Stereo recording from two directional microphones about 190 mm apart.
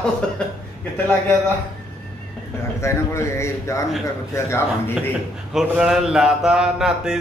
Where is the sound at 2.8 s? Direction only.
15° left (ahead or behind).